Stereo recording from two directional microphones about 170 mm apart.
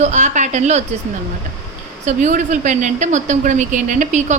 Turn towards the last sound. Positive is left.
turn(degrees=-45)  # may be behind; listen again after turning